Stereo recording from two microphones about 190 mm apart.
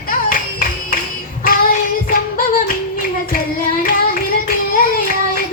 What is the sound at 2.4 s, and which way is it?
Singing, 45° left (ahead or behind).